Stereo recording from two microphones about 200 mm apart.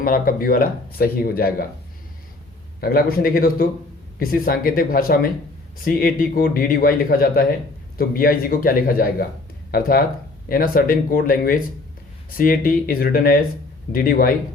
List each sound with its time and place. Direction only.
0.0 s speech: 45° left (ahead or behind)
2.8 s speech: 50° left (ahead or behind)
10.5 s speech: 45° left (ahead or behind)